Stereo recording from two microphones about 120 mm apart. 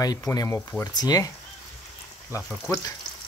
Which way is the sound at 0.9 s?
30° left (ahead or behind).